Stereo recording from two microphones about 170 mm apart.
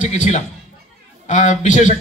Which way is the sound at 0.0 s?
45° left (ahead or behind).